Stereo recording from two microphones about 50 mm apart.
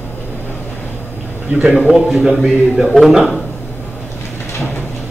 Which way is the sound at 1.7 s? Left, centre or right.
Centre.